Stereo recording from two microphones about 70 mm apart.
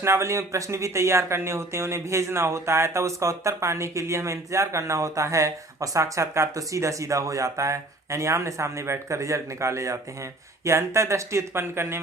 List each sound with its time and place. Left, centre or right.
0.0 s speech: right